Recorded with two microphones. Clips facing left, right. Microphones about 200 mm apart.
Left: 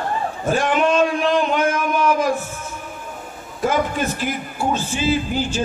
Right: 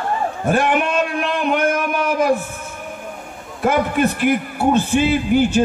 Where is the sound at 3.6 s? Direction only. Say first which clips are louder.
Right 3 dB; 60° right (ahead or behind).